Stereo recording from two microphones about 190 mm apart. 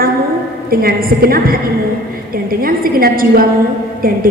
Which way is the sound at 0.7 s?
50° right (ahead or behind).